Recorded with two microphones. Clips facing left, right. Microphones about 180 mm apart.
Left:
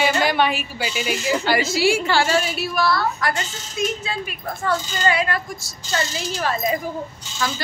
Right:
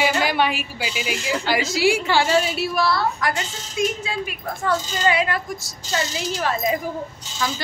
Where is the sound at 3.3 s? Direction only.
10° right (ahead or behind).